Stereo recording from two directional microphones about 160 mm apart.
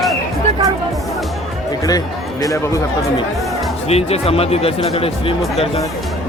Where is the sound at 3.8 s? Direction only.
40° left (ahead or behind).